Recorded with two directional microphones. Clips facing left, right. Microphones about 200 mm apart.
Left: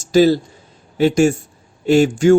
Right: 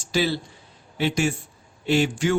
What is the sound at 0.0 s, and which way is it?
A man's voice, 40° left (ahead or behind).